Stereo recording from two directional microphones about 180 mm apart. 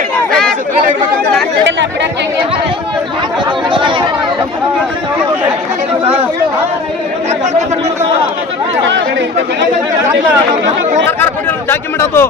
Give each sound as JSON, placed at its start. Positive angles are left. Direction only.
{"t": 3.7, "sound": "chatter", "side_deg": -25}
{"t": 8.8, "sound": "speech", "side_deg": -90}
{"t": 11.7, "sound": "a man's voice", "side_deg": 15}